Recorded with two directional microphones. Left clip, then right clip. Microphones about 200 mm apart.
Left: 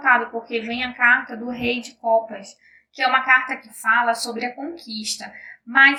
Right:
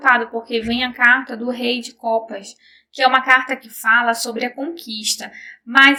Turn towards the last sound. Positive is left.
turn(degrees=-45)  # may be behind; listen again after turning